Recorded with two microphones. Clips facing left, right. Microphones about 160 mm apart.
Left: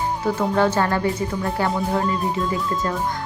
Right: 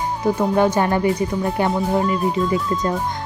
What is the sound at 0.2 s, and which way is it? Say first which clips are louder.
Speech: right 4 dB; 15° right (ahead or behind).